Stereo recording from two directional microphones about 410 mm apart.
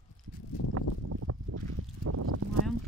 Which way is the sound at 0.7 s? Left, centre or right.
Right.